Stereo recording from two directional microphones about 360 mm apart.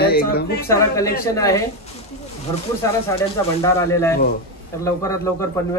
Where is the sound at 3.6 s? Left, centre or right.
Centre.